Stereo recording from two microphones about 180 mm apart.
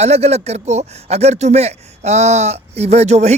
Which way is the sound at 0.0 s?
35° right (ahead or behind).